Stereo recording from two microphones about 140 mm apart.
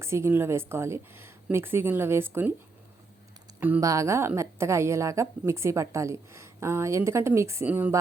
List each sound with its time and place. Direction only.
0.0 s a woman's voice: 20° right (ahead or behind)
3.8 s a woman's voice: 20° right (ahead or behind)